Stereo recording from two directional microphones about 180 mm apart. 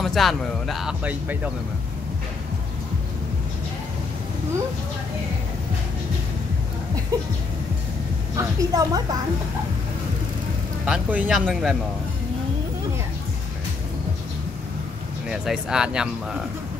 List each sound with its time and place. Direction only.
0.0 s speech: centre (ahead or behind)
8.4 s a woman's voice: 20° right (ahead or behind)
10.9 s speech: 5° right (ahead or behind)
15.2 s speech: 5° right (ahead or behind)